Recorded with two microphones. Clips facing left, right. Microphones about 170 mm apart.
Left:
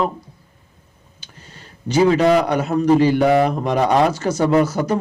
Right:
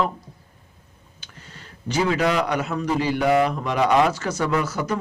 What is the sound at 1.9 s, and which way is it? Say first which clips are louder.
A man's voice: left 7 dB; 30° left (ahead or behind).